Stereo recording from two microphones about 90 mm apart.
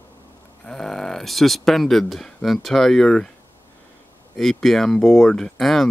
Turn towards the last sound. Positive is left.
turn(degrees=5)  # may be behind; listen again after turning